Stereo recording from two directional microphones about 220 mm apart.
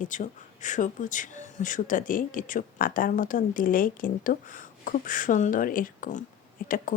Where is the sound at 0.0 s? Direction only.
35° left (ahead or behind).